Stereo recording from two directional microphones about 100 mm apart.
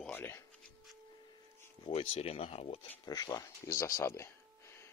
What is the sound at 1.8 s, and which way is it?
Speech, 65° left (ahead or behind).